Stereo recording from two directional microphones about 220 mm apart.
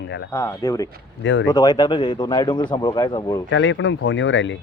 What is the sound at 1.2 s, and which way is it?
Speech, 55° left (ahead or behind).